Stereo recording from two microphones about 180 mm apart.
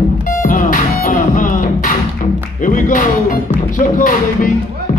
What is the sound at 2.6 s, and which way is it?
Music, 45° left (ahead or behind).